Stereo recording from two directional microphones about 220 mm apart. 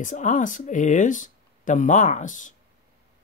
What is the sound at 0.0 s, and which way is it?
Speech, 35° left (ahead or behind).